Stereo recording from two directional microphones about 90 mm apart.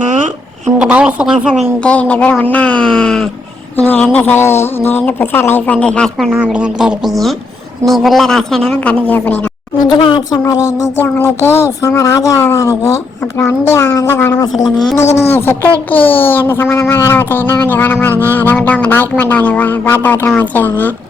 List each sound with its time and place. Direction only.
0.8 s speech: 15° right (ahead or behind)
1.8 s speech: 15° left (ahead or behind)
3.8 s a child's voice: 20° left (ahead or behind)
6.3 s speech: 10° right (ahead or behind); by 8.8 s 5° left (ahead or behind)
8.8 s speech: 15° left (ahead or behind)
9.7 s speech: 55° left (ahead or behind)
10.4 s speech: 35° left (ahead or behind)
14.5 s speech: 5° left (ahead or behind)
14.9 s a child's voice: 30° left (ahead or behind)